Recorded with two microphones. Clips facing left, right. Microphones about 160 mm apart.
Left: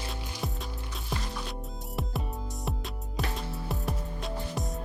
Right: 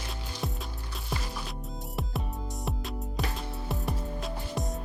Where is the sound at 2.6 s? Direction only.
Centre (ahead or behind).